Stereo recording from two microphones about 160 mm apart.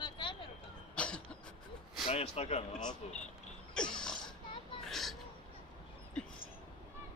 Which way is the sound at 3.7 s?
5° left (ahead or behind).